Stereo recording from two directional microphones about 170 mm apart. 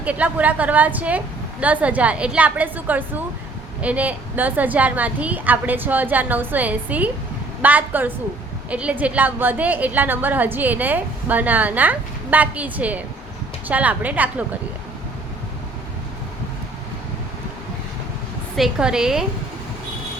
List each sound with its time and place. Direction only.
0.0 s a woman's voice: 10° right (ahead or behind)
18.5 s a woman's voice: 5° right (ahead or behind)